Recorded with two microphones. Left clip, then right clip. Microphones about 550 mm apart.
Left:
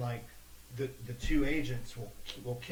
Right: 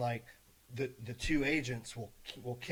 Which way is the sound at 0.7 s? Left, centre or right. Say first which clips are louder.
Even; right.